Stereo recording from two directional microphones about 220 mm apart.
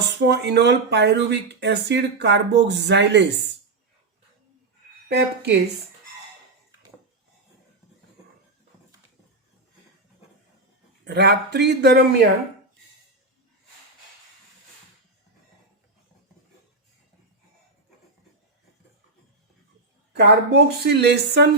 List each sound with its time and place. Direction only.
0.2 s speech: 50° right (ahead or behind)
5.0 s speech: 50° right (ahead or behind)
11.0 s speech: 50° right (ahead or behind)
20.1 s speech: 50° right (ahead or behind)